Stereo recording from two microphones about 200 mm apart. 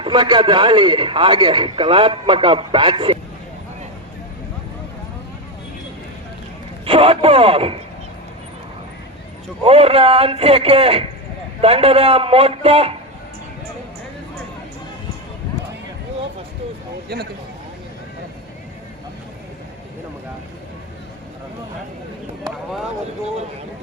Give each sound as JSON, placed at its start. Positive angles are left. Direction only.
{"t": 0.0, "sound": "a man's voice", "side_deg": -25}
{"t": 6.8, "sound": "a man's voice", "side_deg": -30}
{"t": 9.6, "sound": "a man's voice", "side_deg": -30}